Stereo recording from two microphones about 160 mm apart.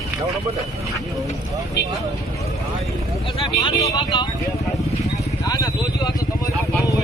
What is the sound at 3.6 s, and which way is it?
Speech, 30° left (ahead or behind).